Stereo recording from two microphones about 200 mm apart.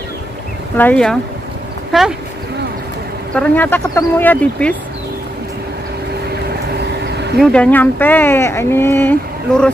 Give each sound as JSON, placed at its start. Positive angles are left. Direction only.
{"t": 0.7, "sound": "speech", "side_deg": 5}
{"t": 3.3, "sound": "speech", "side_deg": 10}
{"t": 6.8, "sound": "vehicle", "side_deg": -55}
{"t": 7.3, "sound": "speech", "side_deg": 5}